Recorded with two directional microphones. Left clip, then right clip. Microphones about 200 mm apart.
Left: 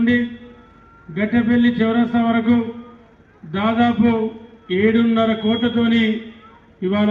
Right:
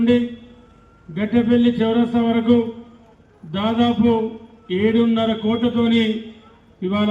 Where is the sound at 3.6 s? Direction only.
35° left (ahead or behind).